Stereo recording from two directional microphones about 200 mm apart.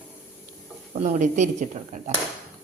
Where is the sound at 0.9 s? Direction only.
40° right (ahead or behind).